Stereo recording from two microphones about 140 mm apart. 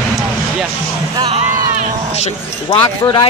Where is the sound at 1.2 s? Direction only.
50° right (ahead or behind).